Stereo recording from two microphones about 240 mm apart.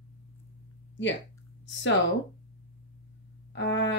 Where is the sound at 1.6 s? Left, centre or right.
Left.